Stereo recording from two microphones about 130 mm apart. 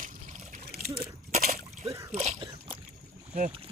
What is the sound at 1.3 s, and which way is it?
Splash, 70° right (ahead or behind).